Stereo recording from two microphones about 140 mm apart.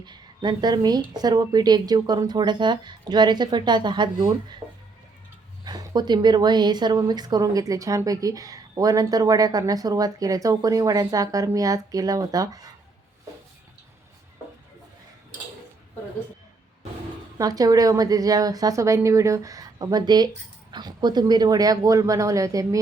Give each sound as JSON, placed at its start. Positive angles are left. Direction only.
{"t": 0.0, "sound": "a woman's voice", "side_deg": -30}
{"t": 5.6, "sound": "a woman's voice", "side_deg": -30}
{"t": 17.3, "sound": "a woman's voice", "side_deg": -25}